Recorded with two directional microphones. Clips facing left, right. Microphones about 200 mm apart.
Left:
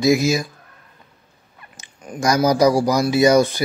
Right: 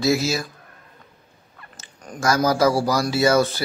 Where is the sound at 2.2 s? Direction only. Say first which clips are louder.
Left 3 dB; 15° left (ahead or behind).